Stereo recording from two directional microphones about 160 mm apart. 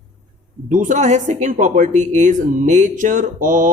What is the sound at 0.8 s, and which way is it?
Speech, 50° right (ahead or behind).